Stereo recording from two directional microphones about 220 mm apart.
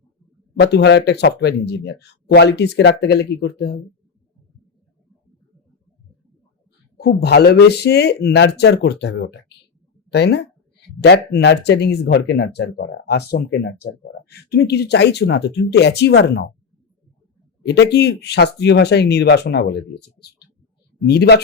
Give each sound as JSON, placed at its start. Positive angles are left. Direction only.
{"t": 0.6, "sound": "speech", "side_deg": 50}
{"t": 7.0, "sound": "speech", "side_deg": 45}
{"t": 17.9, "sound": "speech", "side_deg": 50}